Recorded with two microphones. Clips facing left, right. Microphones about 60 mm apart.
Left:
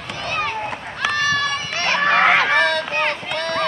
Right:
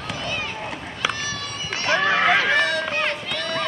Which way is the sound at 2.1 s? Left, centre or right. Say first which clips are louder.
Left 5 dB; left.